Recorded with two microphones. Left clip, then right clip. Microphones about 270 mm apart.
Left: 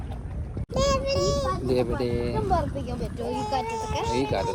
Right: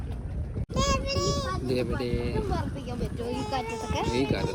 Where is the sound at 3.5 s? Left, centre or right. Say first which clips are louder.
Left 4 dB; centre.